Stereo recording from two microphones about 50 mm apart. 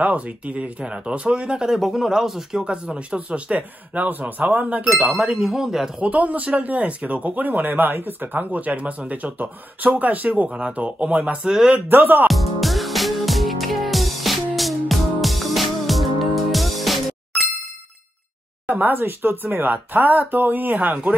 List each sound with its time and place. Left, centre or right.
0.0 s speech: right
1.7 s speech: centre; by 4.8 s right
5.4 s speech: centre
6.0 s speech: right
11.9 s speech: right
12.3 s music: centre
18.7 s speech: right